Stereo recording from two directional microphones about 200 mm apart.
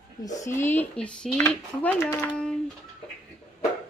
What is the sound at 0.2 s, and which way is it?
Speech, 15° left (ahead or behind).